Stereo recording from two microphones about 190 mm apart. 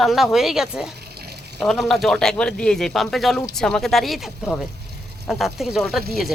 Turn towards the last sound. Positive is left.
turn(degrees=0)  # may be behind; listen again after turning